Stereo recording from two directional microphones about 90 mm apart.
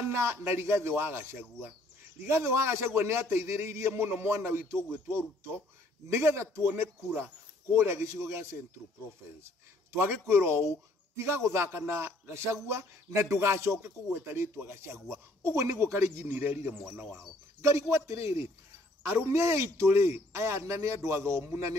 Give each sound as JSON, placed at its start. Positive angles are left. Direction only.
{"t": 0.0, "sound": "a man's voice", "side_deg": -30}
{"t": 9.9, "sound": "a man's voice", "side_deg": -30}
{"t": 17.6, "sound": "a man's voice", "side_deg": -35}